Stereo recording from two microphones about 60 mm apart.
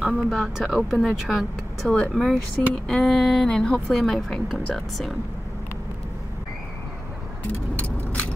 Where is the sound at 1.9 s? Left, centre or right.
Centre.